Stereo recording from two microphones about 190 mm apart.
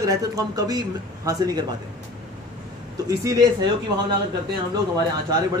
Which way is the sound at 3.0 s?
20° right (ahead or behind).